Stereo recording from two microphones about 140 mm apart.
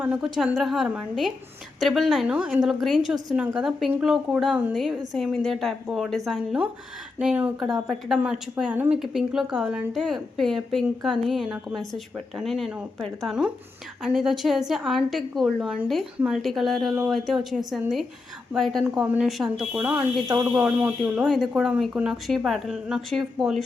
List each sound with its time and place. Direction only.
0.0 s speech: 10° right (ahead or behind)
20.2 s speech: 25° right (ahead or behind)
20.5 s speech: 10° right (ahead or behind)